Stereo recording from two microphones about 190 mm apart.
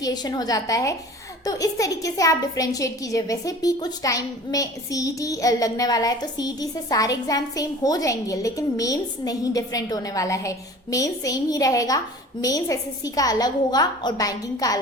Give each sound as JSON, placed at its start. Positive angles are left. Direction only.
{"t": 0.0, "sound": "a woman's voice", "side_deg": 20}